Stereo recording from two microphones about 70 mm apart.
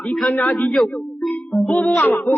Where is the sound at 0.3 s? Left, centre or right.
Left.